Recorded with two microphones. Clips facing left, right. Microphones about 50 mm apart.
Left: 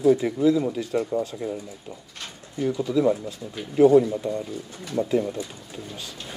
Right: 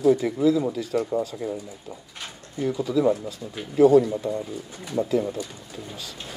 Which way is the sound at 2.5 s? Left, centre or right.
Centre.